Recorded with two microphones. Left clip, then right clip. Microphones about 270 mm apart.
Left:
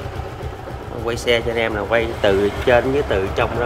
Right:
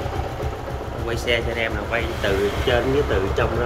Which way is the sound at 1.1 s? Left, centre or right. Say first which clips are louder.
Left 4 dB; centre.